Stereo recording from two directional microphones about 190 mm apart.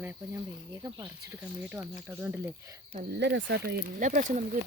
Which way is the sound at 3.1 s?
60° right (ahead or behind).